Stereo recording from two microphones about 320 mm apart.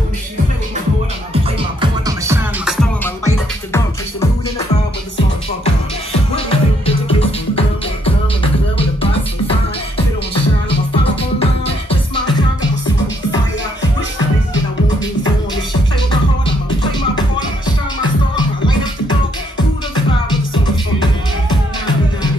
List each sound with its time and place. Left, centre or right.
1.6 s music: centre
6.3 s music: centre
11.3 s music: centre
18.3 s music: centre